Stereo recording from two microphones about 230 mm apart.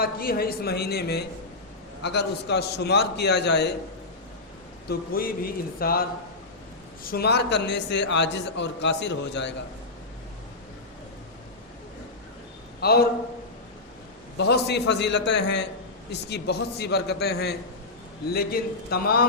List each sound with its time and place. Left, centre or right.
0.0 s a man's voice: left
4.9 s a man's voice: left
12.8 s a man's voice: left
14.3 s a man's voice: left